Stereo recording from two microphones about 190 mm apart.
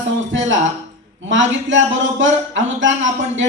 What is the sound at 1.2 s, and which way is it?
A woman's voice, 75° right (ahead or behind).